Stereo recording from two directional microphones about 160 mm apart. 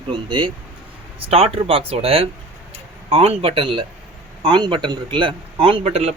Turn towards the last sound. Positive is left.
turn(degrees=-40)  # may be behind; listen again after turning